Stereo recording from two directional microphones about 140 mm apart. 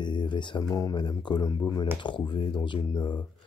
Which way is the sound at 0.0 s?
35° left (ahead or behind).